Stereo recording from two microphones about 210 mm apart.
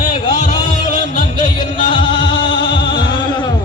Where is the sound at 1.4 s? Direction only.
25° left (ahead or behind).